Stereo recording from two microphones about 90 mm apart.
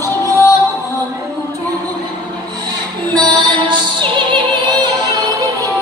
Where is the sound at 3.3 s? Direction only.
60° right (ahead or behind).